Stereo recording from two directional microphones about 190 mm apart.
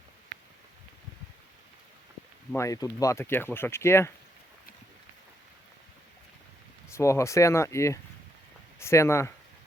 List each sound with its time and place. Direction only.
2.5 s speech: 15° left (ahead or behind)
6.9 s speech: 15° left (ahead or behind)